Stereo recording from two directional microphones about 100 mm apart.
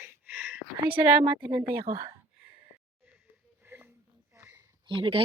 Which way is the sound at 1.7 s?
30° right (ahead or behind).